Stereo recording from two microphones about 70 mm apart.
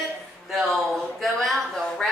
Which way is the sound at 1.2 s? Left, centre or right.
Centre.